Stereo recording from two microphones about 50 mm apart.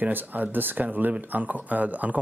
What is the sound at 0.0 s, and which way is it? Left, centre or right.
Speech, right.